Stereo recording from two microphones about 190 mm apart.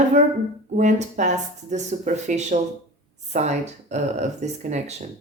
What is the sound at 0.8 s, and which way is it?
Speech, 40° right (ahead or behind).